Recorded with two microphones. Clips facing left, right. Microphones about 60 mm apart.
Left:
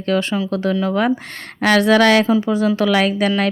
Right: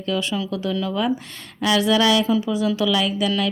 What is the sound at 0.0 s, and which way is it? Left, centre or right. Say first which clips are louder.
Speech: left 5 dB; left.